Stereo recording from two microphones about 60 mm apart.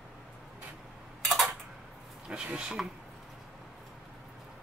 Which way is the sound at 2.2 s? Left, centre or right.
Centre.